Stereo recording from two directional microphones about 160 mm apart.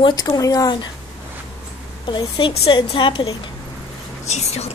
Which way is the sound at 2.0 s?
30° left (ahead or behind).